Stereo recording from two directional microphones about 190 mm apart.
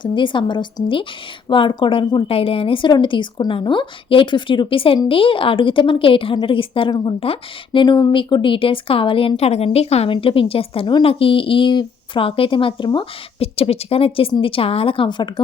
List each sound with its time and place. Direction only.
0.0 s a woman's voice: 25° left (ahead or behind)